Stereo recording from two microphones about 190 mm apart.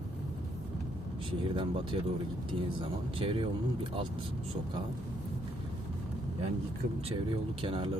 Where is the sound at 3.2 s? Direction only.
25° right (ahead or behind).